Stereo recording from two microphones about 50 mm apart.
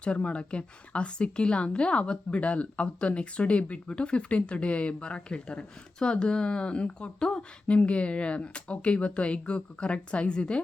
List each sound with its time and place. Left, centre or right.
0.0 s a woman's voice: left